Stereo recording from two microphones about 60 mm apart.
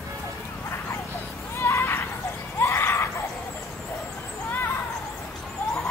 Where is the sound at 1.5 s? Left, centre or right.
Left.